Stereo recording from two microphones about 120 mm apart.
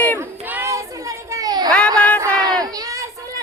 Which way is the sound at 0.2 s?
20° right (ahead or behind).